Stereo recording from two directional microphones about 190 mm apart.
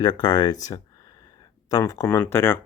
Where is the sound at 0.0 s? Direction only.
20° left (ahead or behind).